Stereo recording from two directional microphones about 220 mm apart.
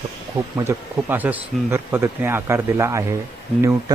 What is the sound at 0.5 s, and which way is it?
A man's voice, 10° right (ahead or behind).